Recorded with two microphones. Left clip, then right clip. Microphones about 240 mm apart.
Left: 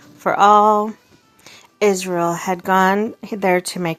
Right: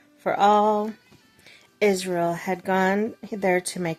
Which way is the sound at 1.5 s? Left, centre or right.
Centre.